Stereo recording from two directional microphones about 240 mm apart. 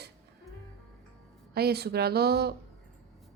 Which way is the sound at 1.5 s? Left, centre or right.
Right.